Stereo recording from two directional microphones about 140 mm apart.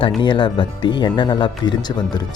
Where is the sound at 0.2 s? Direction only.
35° left (ahead or behind).